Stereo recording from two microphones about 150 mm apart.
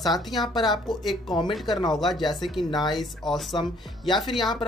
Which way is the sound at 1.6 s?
30° left (ahead or behind).